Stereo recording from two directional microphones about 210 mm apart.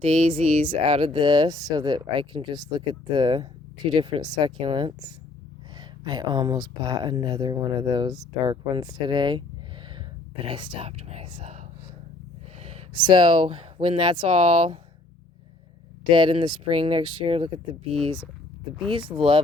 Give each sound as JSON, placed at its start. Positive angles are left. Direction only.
{"t": 0.0, "sound": "speech", "side_deg": -30}
{"t": 9.9, "sound": "whispering", "side_deg": -25}
{"t": 12.5, "sound": "a sound", "side_deg": -30}
{"t": 13.0, "sound": "speech", "side_deg": -20}
{"t": 16.0, "sound": "speech", "side_deg": -20}